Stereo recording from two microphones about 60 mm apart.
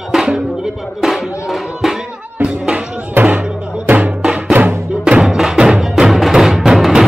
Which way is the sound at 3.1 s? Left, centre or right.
Right.